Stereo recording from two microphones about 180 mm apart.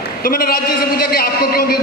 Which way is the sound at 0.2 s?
55° left (ahead or behind).